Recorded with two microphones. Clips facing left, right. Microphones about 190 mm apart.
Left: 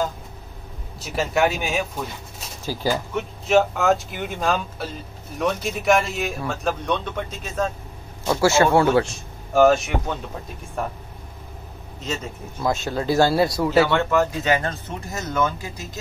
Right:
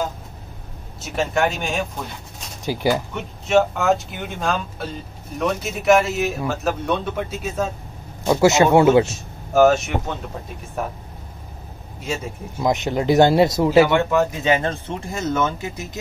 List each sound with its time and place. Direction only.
1.0 s a man's voice: centre (ahead or behind)
2.6 s speech: 15° right (ahead or behind)
3.2 s a man's voice: centre (ahead or behind)
8.3 s speech: 20° right (ahead or behind)
9.0 s a man's voice: 5° right (ahead or behind)
12.0 s speech: 10° right (ahead or behind)